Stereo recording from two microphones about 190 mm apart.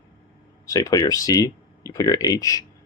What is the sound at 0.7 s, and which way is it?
Speech, 20° left (ahead or behind).